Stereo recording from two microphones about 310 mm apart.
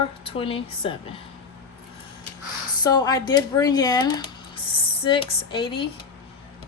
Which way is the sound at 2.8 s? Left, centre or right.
Centre.